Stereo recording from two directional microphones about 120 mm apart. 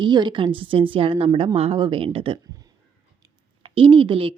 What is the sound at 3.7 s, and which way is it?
Speech, 45° right (ahead or behind).